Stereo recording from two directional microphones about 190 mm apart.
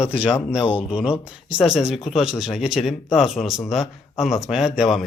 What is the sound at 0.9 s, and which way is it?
Speech, 5° right (ahead or behind).